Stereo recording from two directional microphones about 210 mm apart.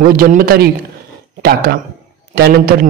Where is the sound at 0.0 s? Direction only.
45° right (ahead or behind).